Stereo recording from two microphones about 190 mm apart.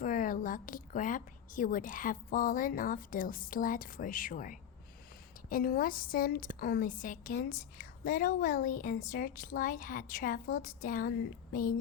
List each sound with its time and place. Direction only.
0.0 s a woman's voice: 45° left (ahead or behind)